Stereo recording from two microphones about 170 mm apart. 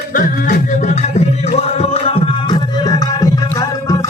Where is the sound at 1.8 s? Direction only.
35° left (ahead or behind).